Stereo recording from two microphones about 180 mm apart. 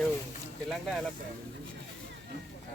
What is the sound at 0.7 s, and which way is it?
Speech, centre (ahead or behind).